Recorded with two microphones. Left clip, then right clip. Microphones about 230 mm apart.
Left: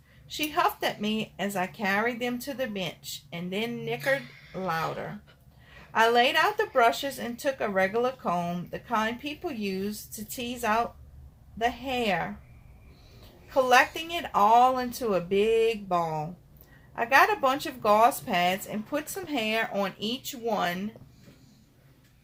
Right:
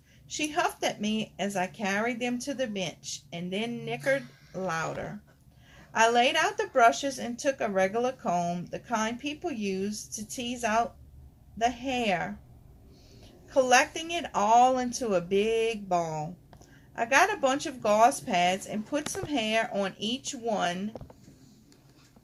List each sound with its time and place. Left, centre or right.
0.3 s speech: left
13.5 s speech: left